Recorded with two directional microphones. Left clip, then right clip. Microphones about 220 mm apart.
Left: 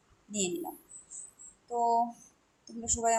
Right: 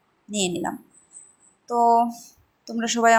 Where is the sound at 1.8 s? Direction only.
15° right (ahead or behind).